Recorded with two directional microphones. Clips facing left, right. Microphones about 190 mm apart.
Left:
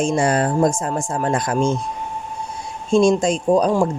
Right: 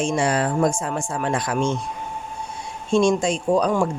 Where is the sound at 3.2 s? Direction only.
40° left (ahead or behind).